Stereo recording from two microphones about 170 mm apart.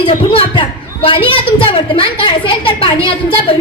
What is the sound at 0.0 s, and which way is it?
A child's voice, 30° left (ahead or behind).